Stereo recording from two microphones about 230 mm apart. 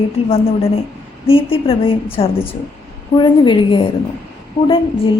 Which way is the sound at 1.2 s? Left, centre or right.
Left.